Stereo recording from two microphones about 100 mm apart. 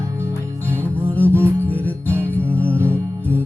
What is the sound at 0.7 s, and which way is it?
Music, 15° left (ahead or behind).